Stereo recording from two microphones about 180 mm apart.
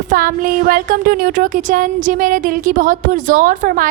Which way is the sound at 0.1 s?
50° right (ahead or behind).